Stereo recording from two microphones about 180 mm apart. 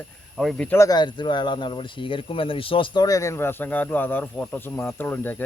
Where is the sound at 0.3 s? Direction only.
5° left (ahead or behind).